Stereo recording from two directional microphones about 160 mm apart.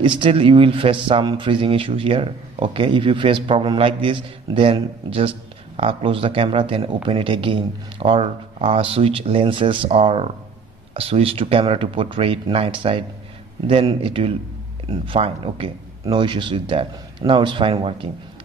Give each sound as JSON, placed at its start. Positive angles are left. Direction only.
{"t": 0.0, "sound": "a man's voice", "side_deg": -30}